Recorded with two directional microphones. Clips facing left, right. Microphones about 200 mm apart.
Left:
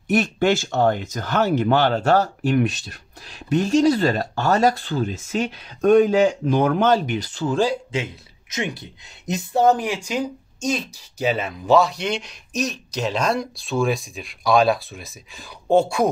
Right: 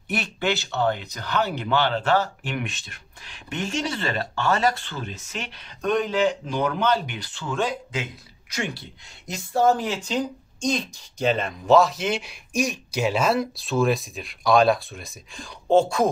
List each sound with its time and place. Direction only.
0.1 s speech: 45° left (ahead or behind); by 16.1 s 10° left (ahead or behind)